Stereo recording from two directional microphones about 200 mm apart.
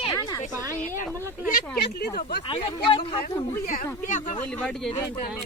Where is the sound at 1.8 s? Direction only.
55° left (ahead or behind).